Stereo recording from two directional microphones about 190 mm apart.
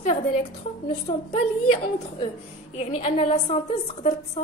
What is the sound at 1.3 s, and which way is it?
A woman's voice, 30° left (ahead or behind).